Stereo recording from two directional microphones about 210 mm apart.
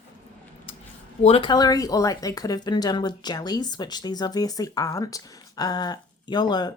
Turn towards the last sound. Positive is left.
turn(degrees=20)  # may be behind; listen again after turning